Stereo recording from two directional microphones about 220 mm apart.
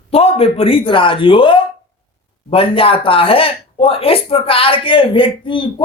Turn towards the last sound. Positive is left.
turn(degrees=20)  # may be behind; listen again after turning